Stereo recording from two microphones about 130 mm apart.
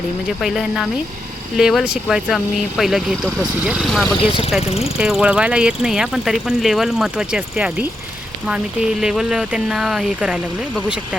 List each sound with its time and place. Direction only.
0.4 s speech: centre (ahead or behind)
3.8 s speech: 5° left (ahead or behind)
4.2 s speech: 45° left (ahead or behind)
4.9 s speech: 5° right (ahead or behind)